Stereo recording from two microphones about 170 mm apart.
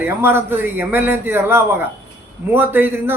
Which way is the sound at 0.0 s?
15° right (ahead or behind).